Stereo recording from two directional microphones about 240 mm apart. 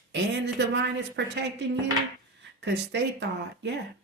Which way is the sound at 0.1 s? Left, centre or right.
Right.